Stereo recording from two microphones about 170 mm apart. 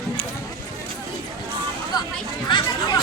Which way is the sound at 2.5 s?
25° left (ahead or behind).